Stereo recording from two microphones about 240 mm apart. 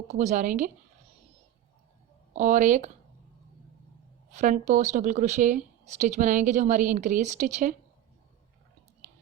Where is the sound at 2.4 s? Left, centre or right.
Right.